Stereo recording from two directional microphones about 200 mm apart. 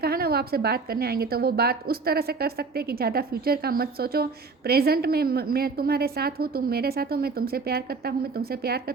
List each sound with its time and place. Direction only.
0.0 s a woman's voice: 50° right (ahead or behind)